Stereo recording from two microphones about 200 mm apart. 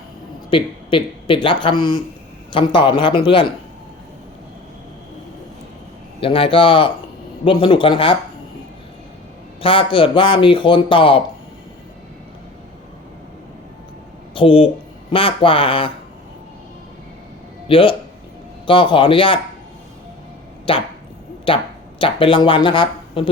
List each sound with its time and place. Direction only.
0.5 s speech: 25° left (ahead or behind)
6.1 s speech: 25° left (ahead or behind)
9.6 s speech: 25° left (ahead or behind)
14.3 s speech: 25° left (ahead or behind)
17.7 s speech: 25° left (ahead or behind)
20.7 s speech: 25° left (ahead or behind)